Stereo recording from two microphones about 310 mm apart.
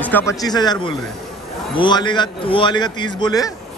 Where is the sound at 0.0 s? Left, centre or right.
Centre.